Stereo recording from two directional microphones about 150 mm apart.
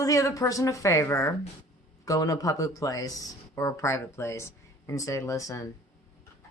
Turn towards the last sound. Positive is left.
turn(degrees=20)  # may be behind; listen again after turning